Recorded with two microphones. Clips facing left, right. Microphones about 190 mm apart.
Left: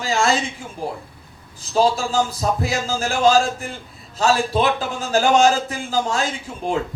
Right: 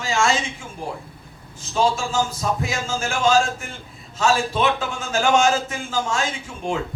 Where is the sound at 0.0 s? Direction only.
35° left (ahead or behind).